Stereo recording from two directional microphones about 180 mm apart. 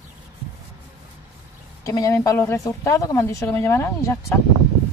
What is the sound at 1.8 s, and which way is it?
A woman's voice, 20° left (ahead or behind).